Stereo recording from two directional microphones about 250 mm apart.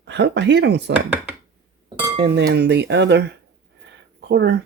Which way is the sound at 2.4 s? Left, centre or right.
Right.